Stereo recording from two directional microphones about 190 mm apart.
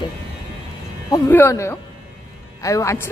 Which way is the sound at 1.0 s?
15° left (ahead or behind).